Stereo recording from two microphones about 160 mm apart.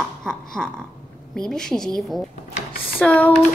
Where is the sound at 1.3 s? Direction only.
5° left (ahead or behind).